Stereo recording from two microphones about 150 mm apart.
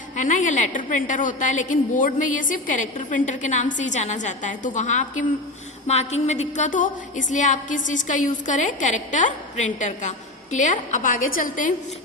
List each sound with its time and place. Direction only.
0.2 s a woman's voice: 55° left (ahead or behind)